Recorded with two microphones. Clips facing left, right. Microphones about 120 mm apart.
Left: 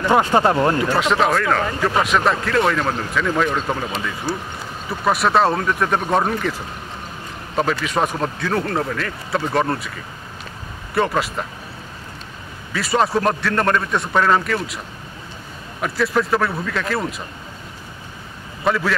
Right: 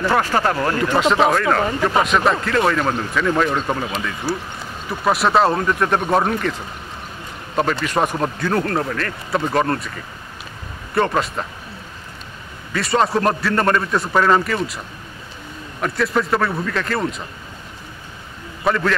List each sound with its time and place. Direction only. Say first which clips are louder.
0.0 s speech: left 2 dB; 20° left (ahead or behind)
0.8 s speech: right 2 dB; centre (ahead or behind)
7.8 s speech: right 1 dB; centre (ahead or behind)
11.0 s speech: right 1 dB; centre (ahead or behind)
12.7 s speech: right 1 dB; centre (ahead or behind)
15.8 s speech: even; centre (ahead or behind)
18.6 s a man's voice: right 1 dB; centre (ahead or behind)